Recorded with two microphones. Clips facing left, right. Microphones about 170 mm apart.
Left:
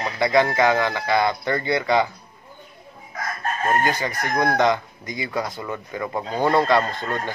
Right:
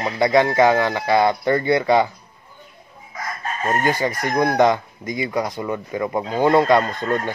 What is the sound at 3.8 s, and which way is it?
Speech, 20° right (ahead or behind).